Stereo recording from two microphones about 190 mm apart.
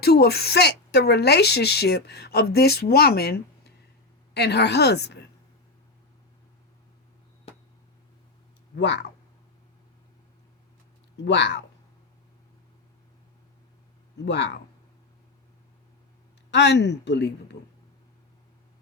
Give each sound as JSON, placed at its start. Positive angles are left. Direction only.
{"t": 0.0, "sound": "a woman's voice", "side_deg": 55}
{"t": 8.7, "sound": "speech", "side_deg": 65}
{"t": 11.3, "sound": "a woman's voice", "side_deg": 65}
{"t": 14.3, "sound": "a woman's voice", "side_deg": 65}
{"t": 16.5, "sound": "a woman's voice", "side_deg": 65}